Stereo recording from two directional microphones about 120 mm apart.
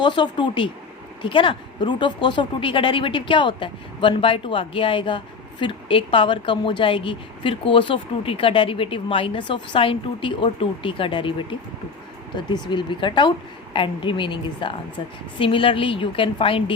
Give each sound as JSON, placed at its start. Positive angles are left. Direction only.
{"t": 0.0, "sound": "speech", "side_deg": 40}
{"t": 12.5, "sound": "speech", "side_deg": 40}